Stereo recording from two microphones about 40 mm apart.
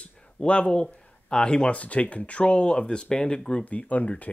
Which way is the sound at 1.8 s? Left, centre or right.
Left.